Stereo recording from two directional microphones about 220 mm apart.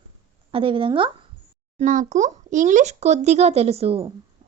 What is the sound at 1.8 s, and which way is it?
A child's voice, 35° right (ahead or behind).